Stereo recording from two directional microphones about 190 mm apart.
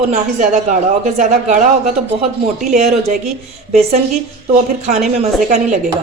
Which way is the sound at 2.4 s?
35° right (ahead or behind).